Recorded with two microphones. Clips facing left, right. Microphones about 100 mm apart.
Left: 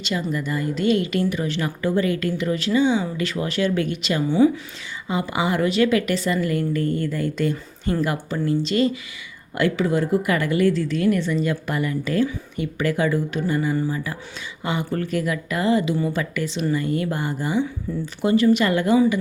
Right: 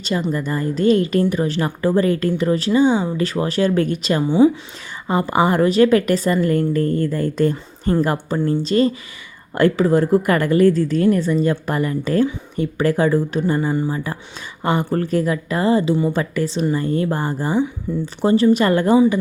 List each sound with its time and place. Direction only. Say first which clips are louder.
0.3 s a woman's voice: right 3 dB; 40° right (ahead or behind)
4.2 s speech: right 3 dB; 25° right (ahead or behind)
5.0 s a woman's voice: right 6 dB; 45° right (ahead or behind); by 19.2 s 30° right (ahead or behind)